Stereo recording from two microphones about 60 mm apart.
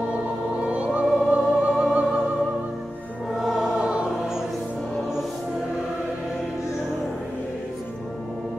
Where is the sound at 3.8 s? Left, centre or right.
Centre.